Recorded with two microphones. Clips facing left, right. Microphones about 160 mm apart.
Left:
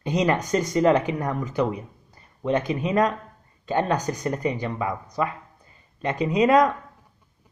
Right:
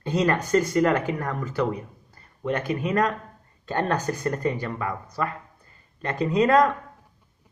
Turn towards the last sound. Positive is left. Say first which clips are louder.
# left 1 dB
turn(degrees=15)  # may be behind; listen again after turning